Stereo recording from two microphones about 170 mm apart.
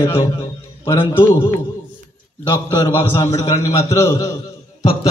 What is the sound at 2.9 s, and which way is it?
A man's voice, 15° left (ahead or behind).